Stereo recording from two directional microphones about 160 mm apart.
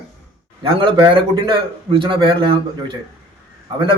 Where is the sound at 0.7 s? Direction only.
30° right (ahead or behind).